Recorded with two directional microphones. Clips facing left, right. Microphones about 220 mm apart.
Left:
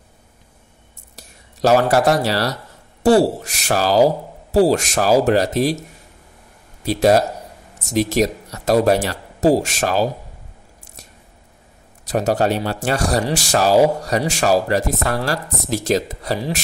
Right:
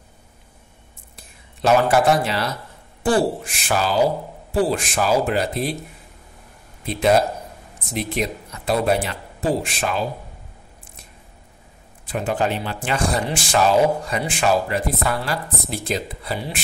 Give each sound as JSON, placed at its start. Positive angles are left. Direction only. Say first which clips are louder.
{"t": 1.1, "sound": "speech", "louder": "left 4 dB", "side_deg": 35}
{"t": 12.1, "sound": "speech", "louder": "left 5 dB", "side_deg": 40}